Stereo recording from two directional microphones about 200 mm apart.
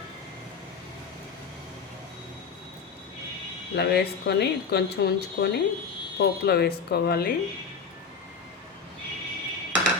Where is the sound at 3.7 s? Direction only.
55° left (ahead or behind).